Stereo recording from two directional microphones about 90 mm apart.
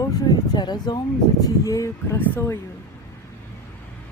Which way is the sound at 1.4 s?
40° left (ahead or behind).